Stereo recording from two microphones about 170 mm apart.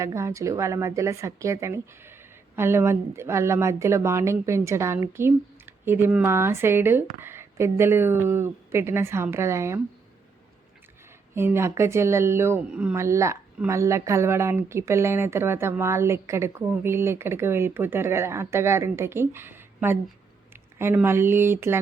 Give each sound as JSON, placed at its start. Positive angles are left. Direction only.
{"t": 0.0, "sound": "speech", "side_deg": -15}
{"t": 11.3, "sound": "speech", "side_deg": -15}